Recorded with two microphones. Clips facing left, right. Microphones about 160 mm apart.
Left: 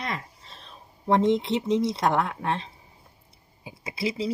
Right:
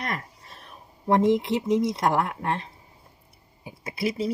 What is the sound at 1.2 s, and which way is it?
Speech, 25° left (ahead or behind).